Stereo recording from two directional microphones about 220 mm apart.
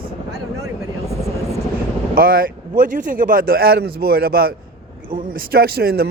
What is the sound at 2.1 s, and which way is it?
Speech, 40° right (ahead or behind).